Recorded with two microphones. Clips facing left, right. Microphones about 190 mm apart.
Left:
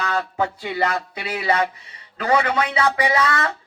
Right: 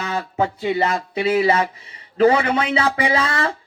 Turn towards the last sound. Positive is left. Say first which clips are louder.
# even
turn(degrees=-30)  # may be behind; listen again after turning